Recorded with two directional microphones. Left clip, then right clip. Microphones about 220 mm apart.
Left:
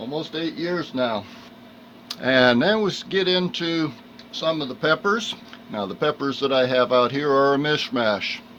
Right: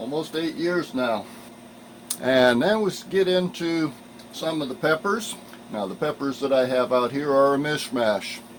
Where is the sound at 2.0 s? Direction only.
20° left (ahead or behind).